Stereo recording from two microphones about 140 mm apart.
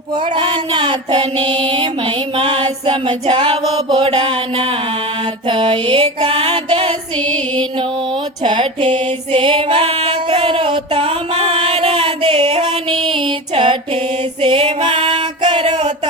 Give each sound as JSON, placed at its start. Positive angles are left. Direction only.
{"t": 0.3, "sound": "child singing", "side_deg": -35}
{"t": 5.5, "sound": "music", "side_deg": -35}
{"t": 8.4, "sound": "music", "side_deg": -35}
{"t": 14.4, "sound": "female singing", "side_deg": -40}